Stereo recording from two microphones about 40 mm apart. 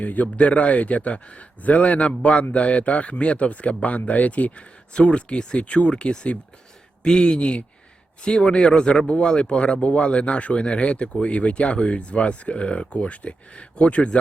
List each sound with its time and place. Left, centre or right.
0.0 s a man's voice: left
5.9 s a man's voice: left